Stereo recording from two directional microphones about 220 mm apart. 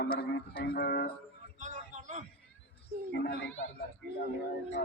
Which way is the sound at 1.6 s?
35° right (ahead or behind).